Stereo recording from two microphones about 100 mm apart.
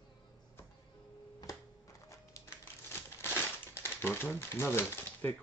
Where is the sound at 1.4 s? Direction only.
35° left (ahead or behind).